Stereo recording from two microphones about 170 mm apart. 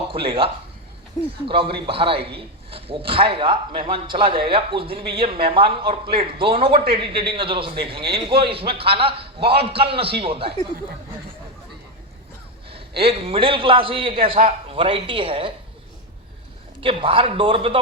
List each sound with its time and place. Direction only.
0.1 s a man's voice: 35° right (ahead or behind)
13.0 s speech: 35° right (ahead or behind)
16.8 s speech: 30° right (ahead or behind)